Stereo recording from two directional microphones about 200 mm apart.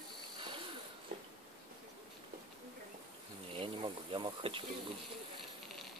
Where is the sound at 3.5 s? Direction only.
25° right (ahead or behind).